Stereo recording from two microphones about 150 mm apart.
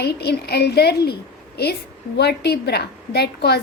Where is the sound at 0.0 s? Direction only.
90° left.